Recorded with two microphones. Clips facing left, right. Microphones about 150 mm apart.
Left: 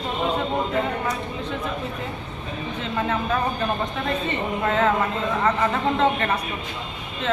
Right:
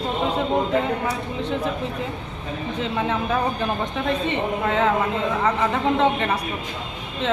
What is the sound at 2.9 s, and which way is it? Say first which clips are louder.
A man's voice: even; 15° right (ahead or behind).